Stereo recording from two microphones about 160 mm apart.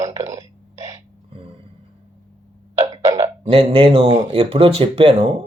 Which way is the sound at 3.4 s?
35° right (ahead or behind).